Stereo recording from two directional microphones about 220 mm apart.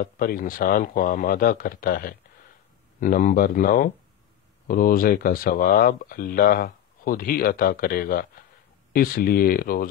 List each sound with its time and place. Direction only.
0.0 s speech: 40° left (ahead or behind)